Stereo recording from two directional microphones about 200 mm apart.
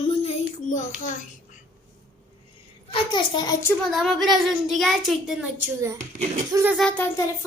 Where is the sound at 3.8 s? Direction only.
Centre (ahead or behind).